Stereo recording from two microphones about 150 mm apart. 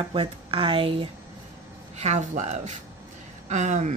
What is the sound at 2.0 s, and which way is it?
Speech, 50° right (ahead or behind).